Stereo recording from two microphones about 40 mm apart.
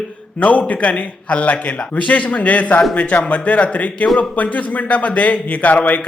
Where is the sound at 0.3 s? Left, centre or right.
Left.